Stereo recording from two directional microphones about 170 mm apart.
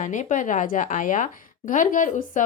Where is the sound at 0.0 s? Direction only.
50° left (ahead or behind).